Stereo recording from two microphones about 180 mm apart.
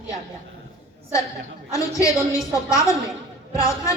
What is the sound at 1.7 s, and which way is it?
A woman's voice, 20° left (ahead or behind).